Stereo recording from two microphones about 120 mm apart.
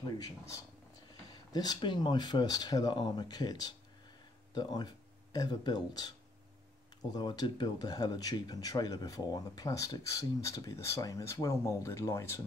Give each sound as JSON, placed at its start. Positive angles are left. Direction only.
{"t": 0.0, "sound": "speech", "side_deg": 30}